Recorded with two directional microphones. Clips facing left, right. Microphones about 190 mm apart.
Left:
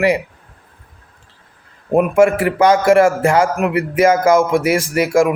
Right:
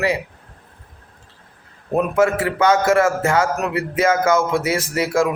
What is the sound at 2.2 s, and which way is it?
A man's voice, 25° left (ahead or behind).